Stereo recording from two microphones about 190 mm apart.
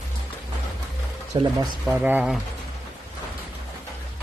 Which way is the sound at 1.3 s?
25° right (ahead or behind).